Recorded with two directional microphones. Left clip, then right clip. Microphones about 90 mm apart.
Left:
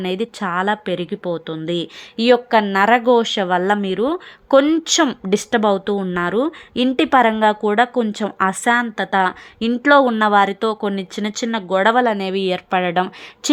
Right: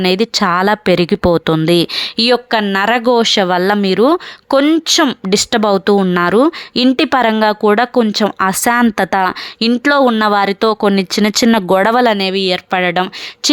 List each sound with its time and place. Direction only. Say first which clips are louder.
0.0 s speech: right 9 dB; 40° right (ahead or behind)
0.3 s speech: right 7 dB; 60° right (ahead or behind); by 1.0 s 90° right
2.2 s speech: even; 40° right (ahead or behind)
3.9 s speech: right 9 dB; 55° right (ahead or behind)
4.5 s speech: right 3 dB; 30° right (ahead or behind)
5.6 s speech: right 6 dB; 55° right (ahead or behind)
6.8 s speech: right 2 dB; 35° right (ahead or behind)
8.4 s speech: right 2 dB; 90° right
9.6 s speech: right 1 dB; 35° right (ahead or behind)
10.4 s speech: right 6 dB; 55° right (ahead or behind); by 12.0 s 90° right
12.0 s speech: right 6 dB; 25° right (ahead or behind)